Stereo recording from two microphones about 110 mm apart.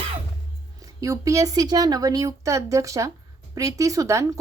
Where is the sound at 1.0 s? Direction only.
30° right (ahead or behind).